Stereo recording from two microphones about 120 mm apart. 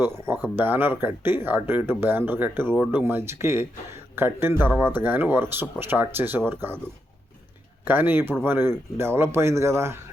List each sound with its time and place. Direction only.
0.0 s a man's voice: 20° right (ahead or behind)
7.9 s speech: 15° right (ahead or behind)